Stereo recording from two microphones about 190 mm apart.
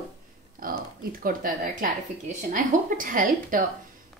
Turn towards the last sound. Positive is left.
turn(degrees=-45)  # may be behind; listen again after turning